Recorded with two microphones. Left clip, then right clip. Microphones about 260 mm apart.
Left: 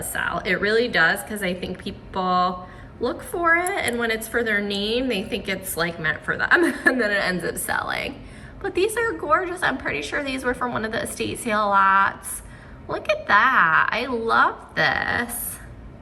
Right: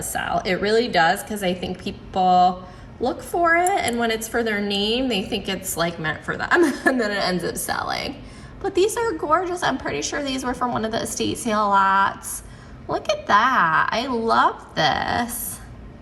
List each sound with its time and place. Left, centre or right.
0.1 s a woman's voice: centre